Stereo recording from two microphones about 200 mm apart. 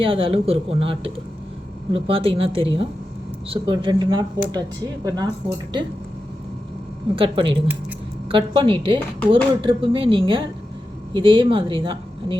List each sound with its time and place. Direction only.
0.0 s speech: 25° right (ahead or behind)
7.2 s speech: 25° right (ahead or behind)